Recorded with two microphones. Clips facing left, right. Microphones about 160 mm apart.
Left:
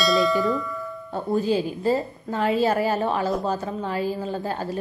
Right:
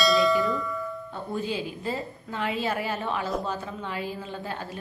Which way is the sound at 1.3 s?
40° left (ahead or behind).